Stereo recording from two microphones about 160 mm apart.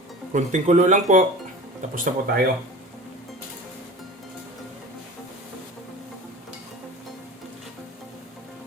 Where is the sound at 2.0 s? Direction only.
60° right (ahead or behind).